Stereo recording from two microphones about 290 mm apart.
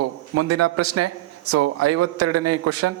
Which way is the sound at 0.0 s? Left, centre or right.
Right.